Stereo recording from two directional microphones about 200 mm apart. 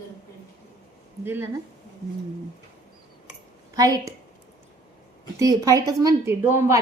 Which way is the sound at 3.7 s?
20° right (ahead or behind).